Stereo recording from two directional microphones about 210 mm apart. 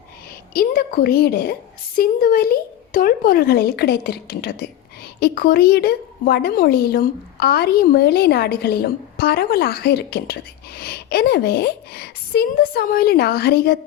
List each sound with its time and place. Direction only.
0.5 s speech: 45° left (ahead or behind)